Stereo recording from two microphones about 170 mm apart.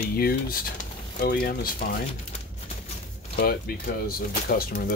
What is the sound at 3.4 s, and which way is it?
Speech, 60° left (ahead or behind).